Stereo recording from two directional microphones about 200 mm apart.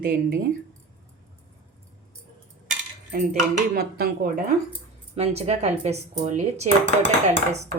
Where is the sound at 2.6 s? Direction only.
40° right (ahead or behind).